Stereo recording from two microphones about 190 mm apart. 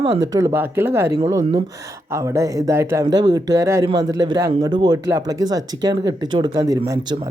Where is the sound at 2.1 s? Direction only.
15° right (ahead or behind).